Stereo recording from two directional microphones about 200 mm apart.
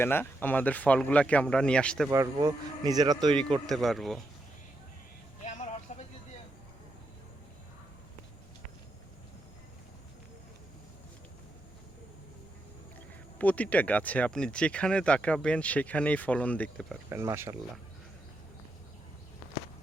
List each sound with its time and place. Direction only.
0.0 s speech: 10° left (ahead or behind)
2.0 s speech: 15° right (ahead or behind)
3.7 s speech: centre (ahead or behind)
5.5 s vehicle: 35° left (ahead or behind)
13.4 s speech: 5° left (ahead or behind)
17.1 s speech: 15° right (ahead or behind)